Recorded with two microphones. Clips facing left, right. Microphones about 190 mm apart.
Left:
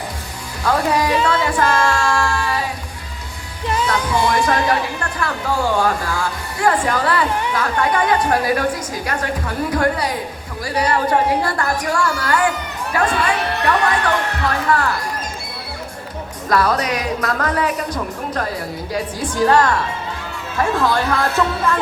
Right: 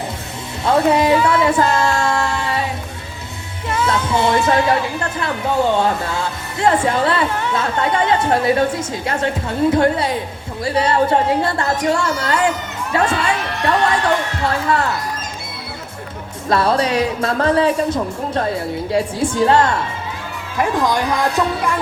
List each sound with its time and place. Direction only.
0.6 s speech: 25° right (ahead or behind)
1.3 s female singing: 25° right (ahead or behind)
3.8 s speech: 25° right (ahead or behind)
14.4 s speech: 25° right (ahead or behind)
16.5 s speech: 25° right (ahead or behind)